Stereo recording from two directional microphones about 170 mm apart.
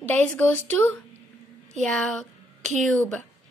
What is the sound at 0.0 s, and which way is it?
A child's voice, 10° left (ahead or behind).